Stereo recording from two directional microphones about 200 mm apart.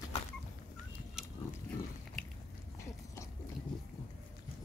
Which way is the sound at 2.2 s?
Centre (ahead or behind).